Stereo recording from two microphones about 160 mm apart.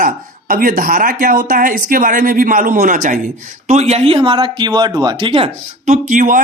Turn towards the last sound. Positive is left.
turn(degrees=-55)  # may be behind; listen again after turning